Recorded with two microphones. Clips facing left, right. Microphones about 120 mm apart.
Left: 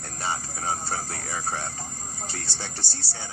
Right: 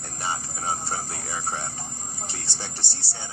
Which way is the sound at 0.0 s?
20° right (ahead or behind).